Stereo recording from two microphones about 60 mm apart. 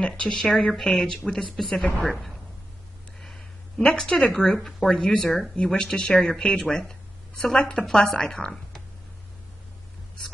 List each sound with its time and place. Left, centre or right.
0.0 s a woman's voice: centre
3.2 s a sound: centre
3.8 s speech: centre
4.6 s speech: centre